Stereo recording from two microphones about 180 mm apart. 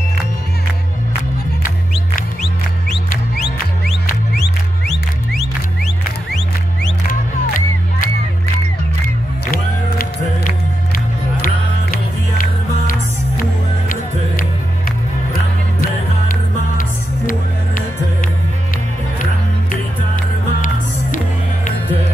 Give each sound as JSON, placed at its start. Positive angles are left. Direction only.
{"t": 4.8, "sound": "music", "side_deg": 0}
{"t": 7.1, "sound": "music", "side_deg": 50}
{"t": 9.5, "sound": "music", "side_deg": 50}
{"t": 15.8, "sound": "music", "side_deg": 50}